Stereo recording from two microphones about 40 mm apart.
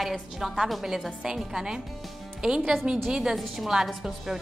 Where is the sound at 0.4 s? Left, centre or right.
Centre.